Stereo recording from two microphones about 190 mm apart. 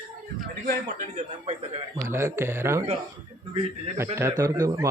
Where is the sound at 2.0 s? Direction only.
15° right (ahead or behind).